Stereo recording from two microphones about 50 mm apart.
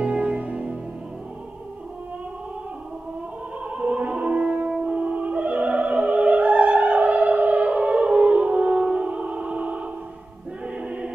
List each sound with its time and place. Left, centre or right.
0.0 s music: right
3.6 s opera: right
10.8 s choir: right